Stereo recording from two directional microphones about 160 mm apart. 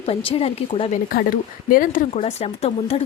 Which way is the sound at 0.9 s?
65° left (ahead or behind).